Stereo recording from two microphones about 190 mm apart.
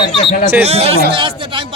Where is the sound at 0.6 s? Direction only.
35° right (ahead or behind).